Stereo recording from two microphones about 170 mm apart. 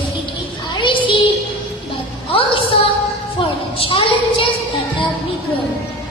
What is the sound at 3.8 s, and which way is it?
Speech, 30° left (ahead or behind).